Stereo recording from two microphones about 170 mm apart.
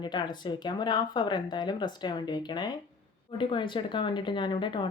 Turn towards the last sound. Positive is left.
turn(degrees=30)  # may be behind; listen again after turning